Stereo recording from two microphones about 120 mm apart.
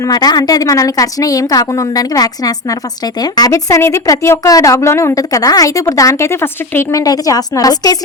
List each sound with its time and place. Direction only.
0.0 s a woman's voice: 35° left (ahead or behind)